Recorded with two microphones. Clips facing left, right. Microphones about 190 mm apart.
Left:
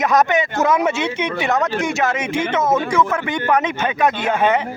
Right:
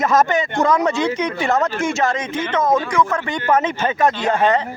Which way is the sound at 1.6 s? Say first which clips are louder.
Even; centre (ahead or behind).